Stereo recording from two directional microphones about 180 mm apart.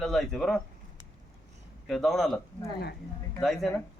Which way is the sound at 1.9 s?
Centre (ahead or behind).